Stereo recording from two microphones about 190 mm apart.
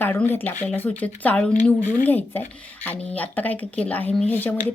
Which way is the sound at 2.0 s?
10° left (ahead or behind).